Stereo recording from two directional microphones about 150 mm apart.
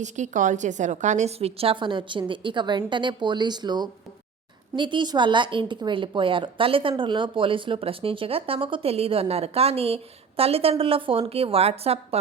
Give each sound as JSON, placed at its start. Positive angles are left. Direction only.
{"t": 0.0, "sound": "a woman's voice", "side_deg": -55}